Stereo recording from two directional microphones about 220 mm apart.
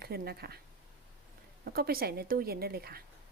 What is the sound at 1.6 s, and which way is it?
Speech, 45° right (ahead or behind).